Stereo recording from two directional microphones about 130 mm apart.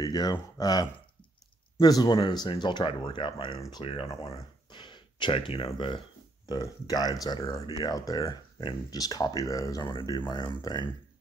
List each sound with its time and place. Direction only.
0.0 s speech: 30° left (ahead or behind)
9.8 s speech: 35° left (ahead or behind)